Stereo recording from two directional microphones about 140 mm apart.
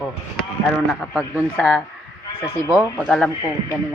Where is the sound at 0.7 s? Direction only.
5° right (ahead or behind).